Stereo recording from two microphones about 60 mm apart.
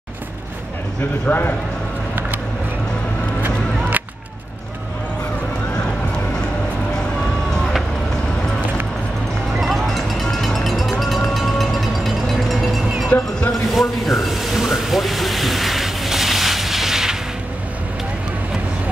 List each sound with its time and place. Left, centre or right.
1.2 s a man's voice: left
9.6 s music: centre
13.5 s a sound: centre